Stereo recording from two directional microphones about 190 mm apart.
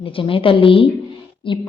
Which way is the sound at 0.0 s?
30° left (ahead or behind).